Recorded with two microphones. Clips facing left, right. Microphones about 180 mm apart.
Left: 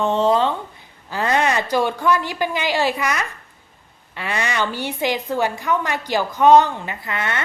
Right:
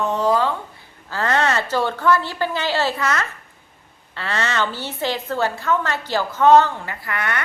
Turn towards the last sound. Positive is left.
turn(degrees=25)  # may be behind; listen again after turning